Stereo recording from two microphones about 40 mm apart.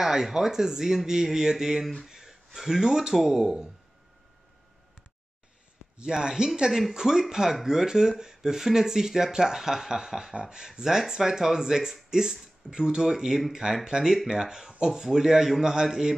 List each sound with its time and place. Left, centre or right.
0.0 s speech: centre
5.9 s speech: centre